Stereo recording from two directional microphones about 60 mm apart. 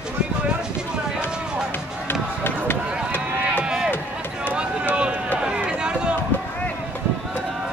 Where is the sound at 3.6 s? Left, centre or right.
Centre.